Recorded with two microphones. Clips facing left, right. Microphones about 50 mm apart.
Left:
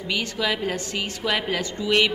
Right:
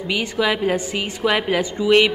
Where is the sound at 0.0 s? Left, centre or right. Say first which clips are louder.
Right 5 dB; centre.